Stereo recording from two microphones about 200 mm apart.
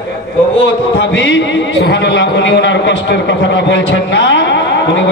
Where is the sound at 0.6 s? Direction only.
65° left (ahead or behind).